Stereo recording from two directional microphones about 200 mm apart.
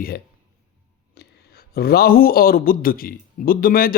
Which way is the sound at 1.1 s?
50° left (ahead or behind).